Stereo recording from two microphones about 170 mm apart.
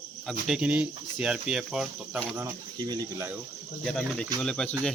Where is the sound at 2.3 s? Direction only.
20° right (ahead or behind).